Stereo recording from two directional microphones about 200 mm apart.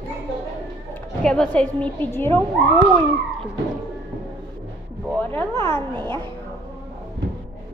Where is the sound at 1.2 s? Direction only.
5° left (ahead or behind).